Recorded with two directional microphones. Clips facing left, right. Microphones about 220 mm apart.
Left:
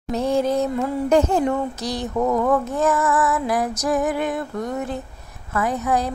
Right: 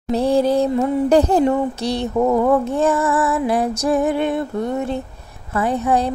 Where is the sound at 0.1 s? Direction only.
35° right (ahead or behind).